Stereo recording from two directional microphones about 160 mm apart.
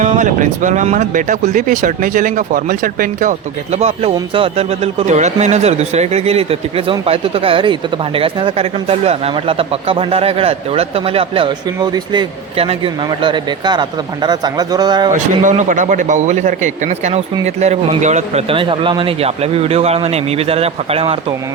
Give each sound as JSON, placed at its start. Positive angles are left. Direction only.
{"t": 0.0, "sound": "speech", "side_deg": -50}
{"t": 15.1, "sound": "a man's voice", "side_deg": -50}